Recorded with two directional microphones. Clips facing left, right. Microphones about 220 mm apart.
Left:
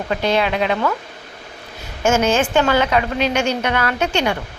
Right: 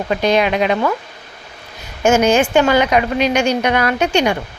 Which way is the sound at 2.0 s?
15° right (ahead or behind).